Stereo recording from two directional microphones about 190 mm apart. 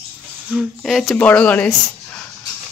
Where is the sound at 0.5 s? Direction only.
5° right (ahead or behind).